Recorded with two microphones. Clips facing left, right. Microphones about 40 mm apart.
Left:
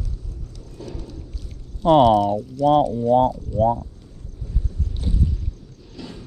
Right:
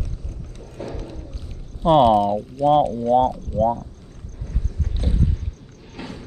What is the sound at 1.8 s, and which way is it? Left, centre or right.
Speech, right.